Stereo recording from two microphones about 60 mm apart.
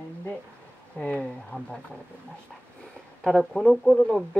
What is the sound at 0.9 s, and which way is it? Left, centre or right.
Speech, left.